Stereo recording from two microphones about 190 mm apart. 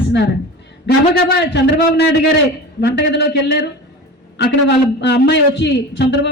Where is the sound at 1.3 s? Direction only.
65° left (ahead or behind).